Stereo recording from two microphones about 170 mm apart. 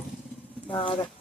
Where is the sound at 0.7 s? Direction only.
30° left (ahead or behind).